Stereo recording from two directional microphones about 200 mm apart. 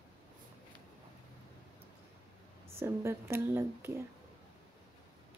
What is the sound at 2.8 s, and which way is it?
A woman's voice, 15° right (ahead or behind).